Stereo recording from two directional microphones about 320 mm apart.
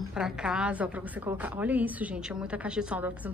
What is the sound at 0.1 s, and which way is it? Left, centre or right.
A woman's voice, centre.